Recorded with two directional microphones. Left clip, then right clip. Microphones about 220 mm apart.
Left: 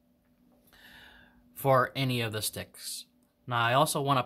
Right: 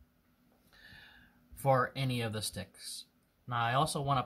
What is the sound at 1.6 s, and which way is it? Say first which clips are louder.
Speech: left 5 dB; 40° left (ahead or behind).